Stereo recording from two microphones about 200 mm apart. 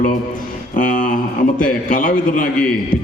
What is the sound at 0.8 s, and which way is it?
A man's voice, 40° left (ahead or behind).